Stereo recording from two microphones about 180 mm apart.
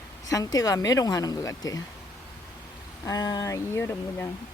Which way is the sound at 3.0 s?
20° left (ahead or behind).